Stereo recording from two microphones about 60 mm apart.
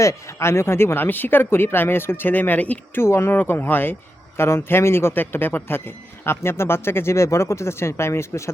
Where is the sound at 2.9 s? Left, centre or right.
Left.